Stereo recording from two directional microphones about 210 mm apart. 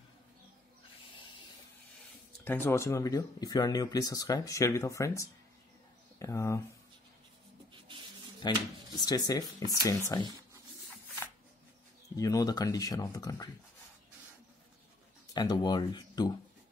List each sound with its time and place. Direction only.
2.4 s speech: 10° left (ahead or behind)
8.4 s speech: 20° left (ahead or behind)
12.2 s speech: 15° left (ahead or behind)
15.3 s speech: 20° left (ahead or behind)